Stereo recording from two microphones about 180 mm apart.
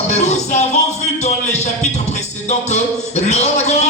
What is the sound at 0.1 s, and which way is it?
Music, 40° left (ahead or behind).